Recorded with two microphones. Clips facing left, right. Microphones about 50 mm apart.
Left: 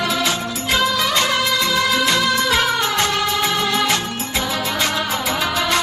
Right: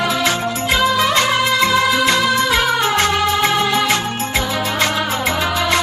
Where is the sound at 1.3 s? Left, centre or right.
Centre.